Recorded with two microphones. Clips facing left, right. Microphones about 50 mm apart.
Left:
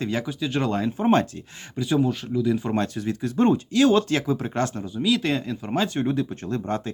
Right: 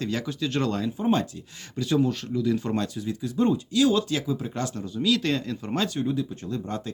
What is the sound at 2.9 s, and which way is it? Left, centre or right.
Speech, left.